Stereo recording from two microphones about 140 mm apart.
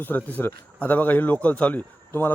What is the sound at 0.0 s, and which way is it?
Speech, 10° left (ahead or behind).